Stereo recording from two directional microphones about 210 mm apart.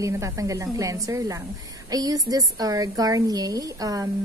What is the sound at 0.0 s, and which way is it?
Speech, 15° right (ahead or behind).